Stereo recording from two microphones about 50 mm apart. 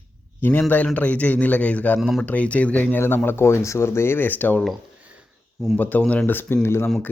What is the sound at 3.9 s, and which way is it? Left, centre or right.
Speech, left.